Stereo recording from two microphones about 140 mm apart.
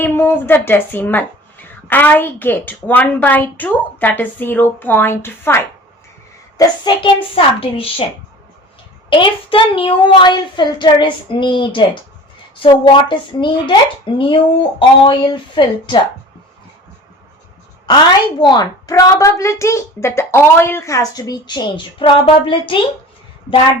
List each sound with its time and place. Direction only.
0.0 s speech: 15° left (ahead or behind)
6.6 s a woman's voice: 35° left (ahead or behind)
9.0 s a woman's voice: 35° left (ahead or behind)
17.8 s a woman's voice: 30° left (ahead or behind)